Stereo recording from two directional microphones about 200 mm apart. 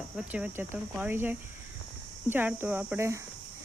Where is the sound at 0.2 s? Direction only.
5° right (ahead or behind).